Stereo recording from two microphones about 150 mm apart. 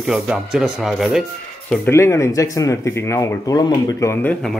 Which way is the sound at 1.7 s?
15° left (ahead or behind).